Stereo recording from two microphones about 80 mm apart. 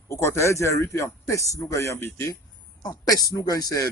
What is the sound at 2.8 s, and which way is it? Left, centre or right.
Speech, left.